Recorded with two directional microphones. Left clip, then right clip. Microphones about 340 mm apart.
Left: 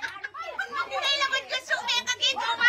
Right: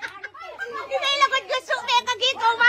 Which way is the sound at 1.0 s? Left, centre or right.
Centre.